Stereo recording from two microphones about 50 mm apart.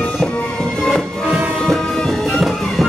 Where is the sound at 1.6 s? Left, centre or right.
Centre.